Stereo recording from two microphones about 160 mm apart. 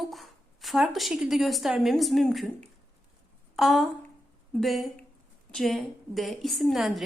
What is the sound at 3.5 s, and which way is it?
A woman's voice, centre (ahead or behind).